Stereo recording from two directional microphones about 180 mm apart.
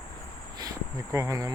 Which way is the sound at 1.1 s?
15° right (ahead or behind).